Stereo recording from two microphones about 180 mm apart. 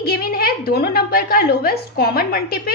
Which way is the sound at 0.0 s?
55° left (ahead or behind).